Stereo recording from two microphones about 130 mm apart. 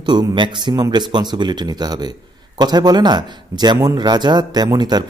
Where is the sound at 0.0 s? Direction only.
35° right (ahead or behind).